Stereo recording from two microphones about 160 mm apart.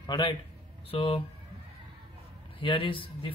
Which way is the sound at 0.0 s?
30° left (ahead or behind).